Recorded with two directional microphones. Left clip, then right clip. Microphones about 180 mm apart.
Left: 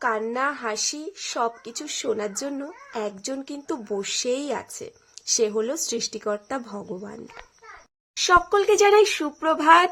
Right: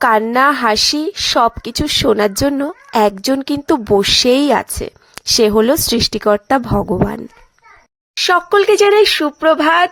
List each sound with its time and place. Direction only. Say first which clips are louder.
0.0 s a woman's voice: right 13 dB; 50° right (ahead or behind)
8.1 s speech: right 6 dB; 30° right (ahead or behind)